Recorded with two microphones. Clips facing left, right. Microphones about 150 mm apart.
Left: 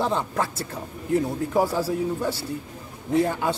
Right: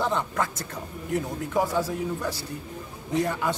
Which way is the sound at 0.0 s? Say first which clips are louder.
Left 2 dB; 30° left (ahead or behind).